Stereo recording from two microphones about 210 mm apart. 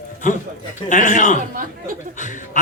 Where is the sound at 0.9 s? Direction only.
35° left (ahead or behind).